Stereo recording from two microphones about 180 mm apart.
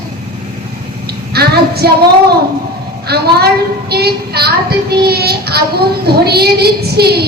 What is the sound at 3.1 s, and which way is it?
A child's voice, 60° right (ahead or behind).